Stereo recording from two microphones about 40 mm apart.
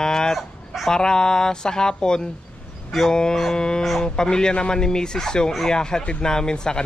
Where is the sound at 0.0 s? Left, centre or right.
Centre.